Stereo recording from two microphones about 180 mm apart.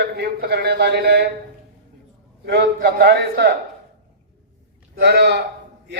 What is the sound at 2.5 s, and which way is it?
A man's voice, 65° right (ahead or behind).